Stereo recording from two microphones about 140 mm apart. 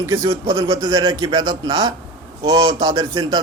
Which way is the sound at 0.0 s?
25° right (ahead or behind).